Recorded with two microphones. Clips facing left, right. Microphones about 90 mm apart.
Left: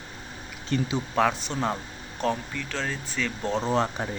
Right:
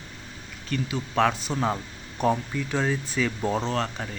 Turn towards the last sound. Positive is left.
turn(degrees=20)  # may be behind; listen again after turning